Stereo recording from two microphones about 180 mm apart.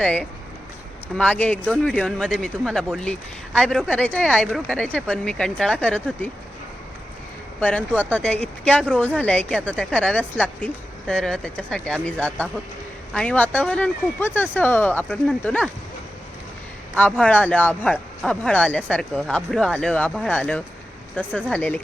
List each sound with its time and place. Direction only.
0.0 s speech: 10° left (ahead or behind)
7.6 s speech: 10° left (ahead or behind)
17.0 s speech: 5° left (ahead or behind)